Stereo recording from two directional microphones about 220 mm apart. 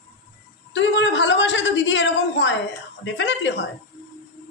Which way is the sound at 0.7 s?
55° left (ahead or behind).